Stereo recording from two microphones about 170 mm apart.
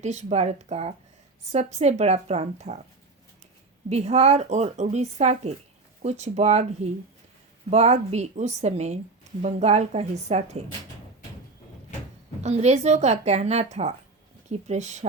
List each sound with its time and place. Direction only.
0.0 s a woman's voice: 40° right (ahead or behind)
3.8 s a woman's voice: 40° right (ahead or behind)
12.4 s a woman's voice: 40° right (ahead or behind)